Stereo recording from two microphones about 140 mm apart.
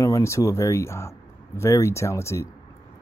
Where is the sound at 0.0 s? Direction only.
20° left (ahead or behind).